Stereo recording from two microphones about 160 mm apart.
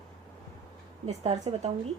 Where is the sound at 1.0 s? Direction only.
40° right (ahead or behind).